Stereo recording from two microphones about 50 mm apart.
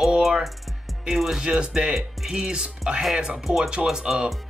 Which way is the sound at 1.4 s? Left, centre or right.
Centre.